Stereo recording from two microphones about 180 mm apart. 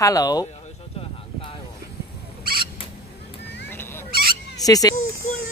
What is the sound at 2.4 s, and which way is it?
Rodents, 55° right (ahead or behind).